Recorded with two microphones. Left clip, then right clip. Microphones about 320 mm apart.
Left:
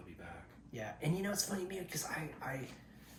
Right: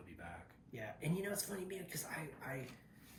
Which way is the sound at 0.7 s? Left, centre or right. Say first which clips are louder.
Left 3 dB; centre.